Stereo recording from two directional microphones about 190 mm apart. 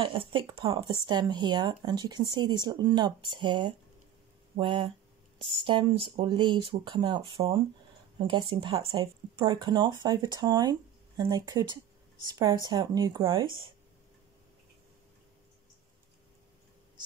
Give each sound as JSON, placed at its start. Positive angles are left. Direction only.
{"t": 0.0, "sound": "speech", "side_deg": -30}